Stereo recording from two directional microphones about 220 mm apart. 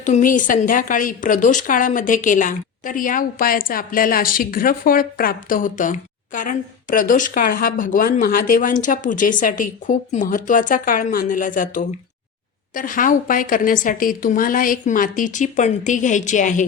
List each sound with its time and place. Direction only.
0.0 s speech: 35° left (ahead or behind)